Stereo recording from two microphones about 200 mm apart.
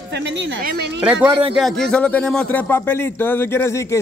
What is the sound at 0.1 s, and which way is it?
Speech, 60° right (ahead or behind).